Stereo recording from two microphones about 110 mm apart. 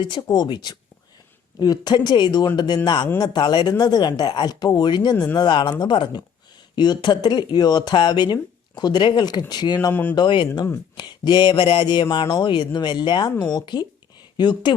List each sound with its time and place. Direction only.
0.0 s speech: 45° left (ahead or behind)
9.9 s speech: 15° left (ahead or behind)
10.2 s speech: 45° left (ahead or behind)